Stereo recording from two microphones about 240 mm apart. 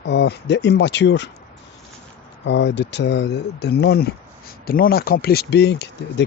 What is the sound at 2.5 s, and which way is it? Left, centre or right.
Speech, left.